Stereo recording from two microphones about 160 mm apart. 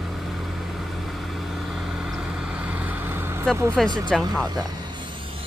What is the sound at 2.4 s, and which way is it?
Vehicle, 5° right (ahead or behind).